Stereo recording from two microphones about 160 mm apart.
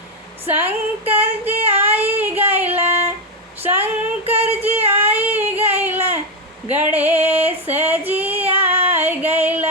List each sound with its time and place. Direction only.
0.6 s female singing: 10° right (ahead or behind)
1.6 s child singing: 15° right (ahead or behind)
2.4 s music: 15° right (ahead or behind)
3.6 s a sound: 15° right (ahead or behind)
4.2 s child singing: 40° right (ahead or behind)
4.8 s a sound: 10° right (ahead or behind)
6.7 s female singing: 10° right (ahead or behind)
8.5 s child singing: 10° right (ahead or behind)
8.9 s music: 15° right (ahead or behind)